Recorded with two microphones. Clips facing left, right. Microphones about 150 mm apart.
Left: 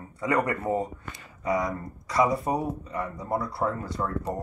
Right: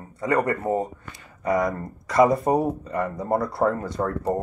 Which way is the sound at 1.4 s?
50° right (ahead or behind).